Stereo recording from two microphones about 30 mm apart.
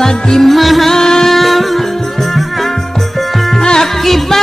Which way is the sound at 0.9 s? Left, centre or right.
Centre.